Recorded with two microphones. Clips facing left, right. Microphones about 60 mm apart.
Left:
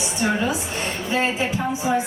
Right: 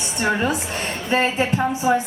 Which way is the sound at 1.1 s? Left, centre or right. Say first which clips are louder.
Right 3 dB; right.